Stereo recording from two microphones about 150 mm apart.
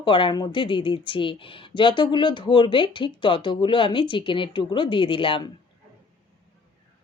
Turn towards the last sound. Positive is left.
turn(degrees=35)  # may be behind; listen again after turning